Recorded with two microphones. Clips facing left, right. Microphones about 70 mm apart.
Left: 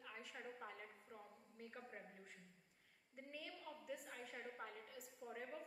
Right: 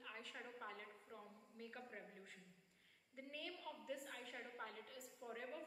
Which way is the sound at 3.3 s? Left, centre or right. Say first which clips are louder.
Right 2 dB; centre.